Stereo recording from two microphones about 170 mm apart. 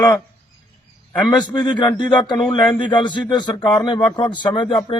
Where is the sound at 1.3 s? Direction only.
25° left (ahead or behind).